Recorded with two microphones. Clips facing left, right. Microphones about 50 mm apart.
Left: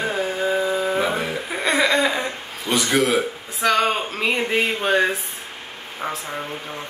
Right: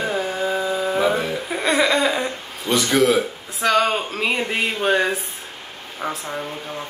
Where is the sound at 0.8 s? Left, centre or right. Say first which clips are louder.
Right 2 dB; centre.